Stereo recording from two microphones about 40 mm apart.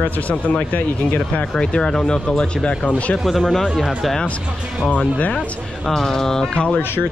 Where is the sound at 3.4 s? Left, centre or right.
Centre.